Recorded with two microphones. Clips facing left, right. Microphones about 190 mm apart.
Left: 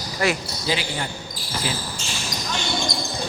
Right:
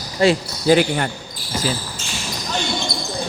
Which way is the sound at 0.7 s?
55° right (ahead or behind).